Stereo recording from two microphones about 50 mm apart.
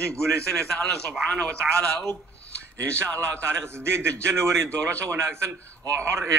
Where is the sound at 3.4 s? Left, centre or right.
Right.